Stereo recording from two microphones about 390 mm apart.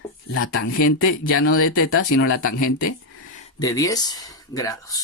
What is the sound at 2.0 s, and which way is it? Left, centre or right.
Speech, left.